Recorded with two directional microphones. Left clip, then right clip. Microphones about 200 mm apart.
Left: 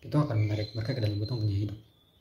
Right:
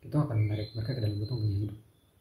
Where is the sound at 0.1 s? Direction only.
5° right (ahead or behind).